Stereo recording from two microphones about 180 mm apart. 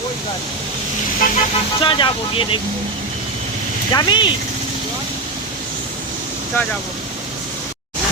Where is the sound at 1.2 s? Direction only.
50° left (ahead or behind).